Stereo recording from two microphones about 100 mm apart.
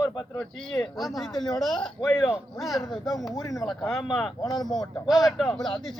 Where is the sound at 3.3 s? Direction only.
35° left (ahead or behind).